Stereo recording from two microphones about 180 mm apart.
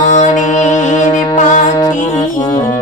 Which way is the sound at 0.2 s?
40° left (ahead or behind).